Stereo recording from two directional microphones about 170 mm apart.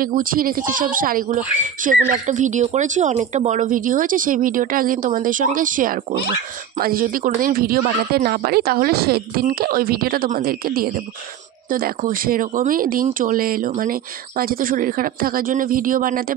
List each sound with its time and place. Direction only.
0.0 s speech: 55° right (ahead or behind)